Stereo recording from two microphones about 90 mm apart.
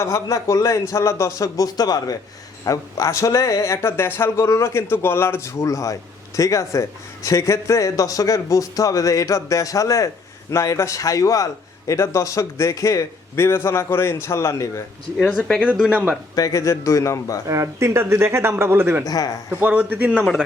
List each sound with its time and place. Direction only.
0.0 s speech: 35° left (ahead or behind)
2.6 s speech: 35° left (ahead or behind)
15.3 s speech: 15° left (ahead or behind)
15.6 s speech: 10° right (ahead or behind)
16.3 s speech: 40° left (ahead or behind)
17.5 s speech: 30° right (ahead or behind)
19.0 s speech: 45° left (ahead or behind)
19.5 s speech: 20° right (ahead or behind)